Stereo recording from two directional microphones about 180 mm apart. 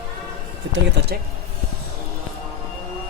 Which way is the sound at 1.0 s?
70° right (ahead or behind).